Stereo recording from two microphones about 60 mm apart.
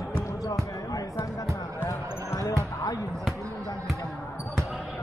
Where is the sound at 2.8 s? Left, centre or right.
Left.